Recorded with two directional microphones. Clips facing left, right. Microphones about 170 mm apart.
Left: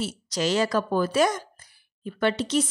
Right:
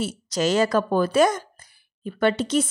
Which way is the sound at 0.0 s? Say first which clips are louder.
Right 3 dB; 50° right (ahead or behind).